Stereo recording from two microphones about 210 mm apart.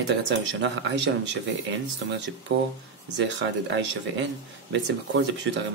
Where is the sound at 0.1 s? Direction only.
60° right (ahead or behind).